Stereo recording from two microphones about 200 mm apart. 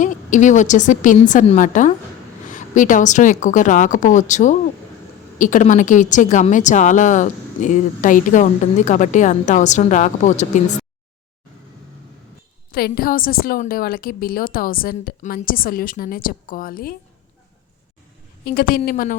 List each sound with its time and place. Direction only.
0.0 s a woman's voice: 40° left (ahead or behind)
12.7 s a woman's voice: 50° left (ahead or behind)
18.4 s a woman's voice: 45° left (ahead or behind)